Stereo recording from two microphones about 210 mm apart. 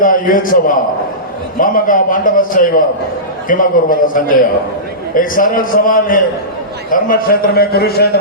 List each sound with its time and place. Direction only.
0.0 s a man's voice: 40° left (ahead or behind)